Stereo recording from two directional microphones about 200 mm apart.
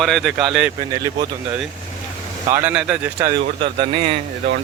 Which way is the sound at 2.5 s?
10° right (ahead or behind).